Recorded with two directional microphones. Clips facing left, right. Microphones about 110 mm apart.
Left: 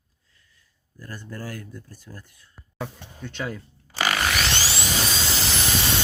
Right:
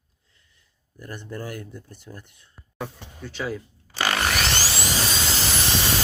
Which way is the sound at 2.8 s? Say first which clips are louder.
Even; 5° right (ahead or behind).